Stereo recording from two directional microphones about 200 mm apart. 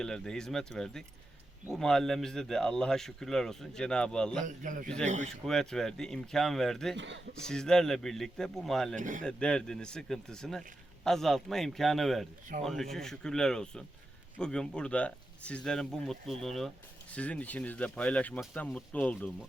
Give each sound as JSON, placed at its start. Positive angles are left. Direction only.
{"t": 0.0, "sound": "speech", "side_deg": 5}
{"t": 4.4, "sound": "a man's voice", "side_deg": -40}
{"t": 5.5, "sound": "speech", "side_deg": 0}
{"t": 6.9, "sound": "a man's voice", "side_deg": -65}
{"t": 7.3, "sound": "speech", "side_deg": 5}
{"t": 9.0, "sound": "a man's voice", "side_deg": -40}
{"t": 9.2, "sound": "speech", "side_deg": 5}